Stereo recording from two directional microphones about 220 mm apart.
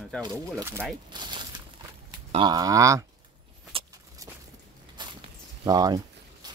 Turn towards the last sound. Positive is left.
turn(degrees=-20)  # may be behind; listen again after turning